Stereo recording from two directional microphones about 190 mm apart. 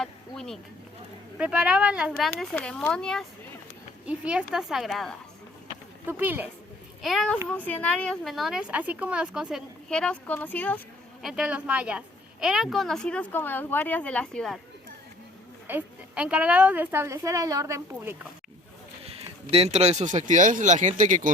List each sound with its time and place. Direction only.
0.0 s a sound: 5° left (ahead or behind)
1.4 s a woman's voice: 5° right (ahead or behind)
6.1 s a woman's voice: 10° right (ahead or behind)
7.0 s a woman's voice: centre (ahead or behind)
15.6 s a woman's voice: 10° right (ahead or behind)
19.0 s speech: 30° right (ahead or behind)